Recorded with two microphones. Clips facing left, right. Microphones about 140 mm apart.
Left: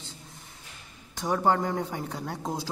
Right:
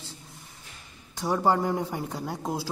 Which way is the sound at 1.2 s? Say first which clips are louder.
Right 1 dB; 5° right (ahead or behind).